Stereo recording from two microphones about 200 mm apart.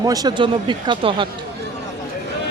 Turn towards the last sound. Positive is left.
turn(degrees=-25)  # may be behind; listen again after turning